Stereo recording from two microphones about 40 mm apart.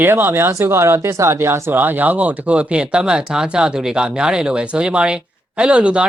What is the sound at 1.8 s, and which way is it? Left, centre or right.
Speech, right.